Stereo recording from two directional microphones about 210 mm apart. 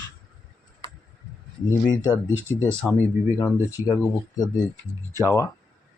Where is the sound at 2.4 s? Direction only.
10° right (ahead or behind).